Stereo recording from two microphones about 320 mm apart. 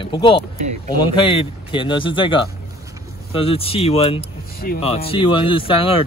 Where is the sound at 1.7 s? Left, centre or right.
Centre.